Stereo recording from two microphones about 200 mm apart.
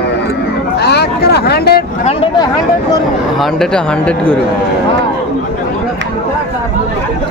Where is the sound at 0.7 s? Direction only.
55° left (ahead or behind).